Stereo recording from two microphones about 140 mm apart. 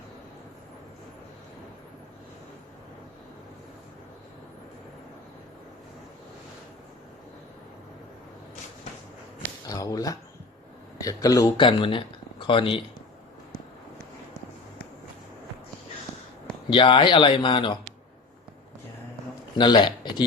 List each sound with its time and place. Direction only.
9.6 s a sound: 25° left (ahead or behind)
10.9 s speech: 25° left (ahead or behind)
11.5 s speech: 35° left (ahead or behind)
16.6 s speech: 35° left (ahead or behind)
19.5 s speech: 30° left (ahead or behind)